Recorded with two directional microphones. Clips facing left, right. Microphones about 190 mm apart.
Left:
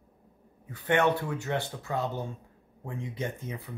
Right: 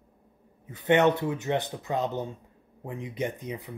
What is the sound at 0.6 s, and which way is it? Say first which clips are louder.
Speech: right 4 dB; 20° right (ahead or behind).